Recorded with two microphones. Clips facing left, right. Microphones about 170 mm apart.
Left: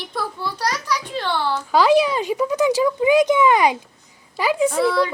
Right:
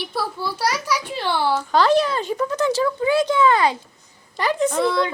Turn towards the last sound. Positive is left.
turn(degrees=5)  # may be behind; listen again after turning